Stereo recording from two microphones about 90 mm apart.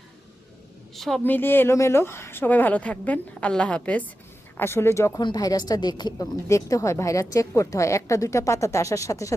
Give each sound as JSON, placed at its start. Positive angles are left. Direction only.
{"t": 0.9, "sound": "a woman's voice", "side_deg": 0}
{"t": 1.2, "sound": "speech", "side_deg": 20}
{"t": 4.5, "sound": "speech", "side_deg": 30}
{"t": 5.2, "sound": "speech", "side_deg": 45}
{"t": 6.5, "sound": "a woman's voice", "side_deg": 35}